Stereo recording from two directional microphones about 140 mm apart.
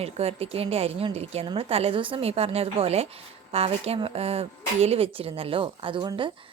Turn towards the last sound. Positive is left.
turn(degrees=-35)  # may be behind; listen again after turning